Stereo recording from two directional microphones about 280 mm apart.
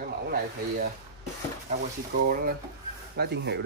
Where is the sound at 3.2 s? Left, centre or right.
Right.